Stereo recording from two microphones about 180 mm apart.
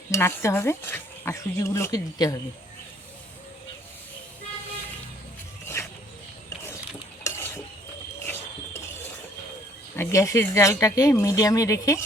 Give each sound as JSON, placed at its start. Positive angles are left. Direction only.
{"t": 0.1, "sound": "speech", "side_deg": 15}
{"t": 7.3, "sound": "a sound", "side_deg": 15}
{"t": 9.9, "sound": "speech", "side_deg": 15}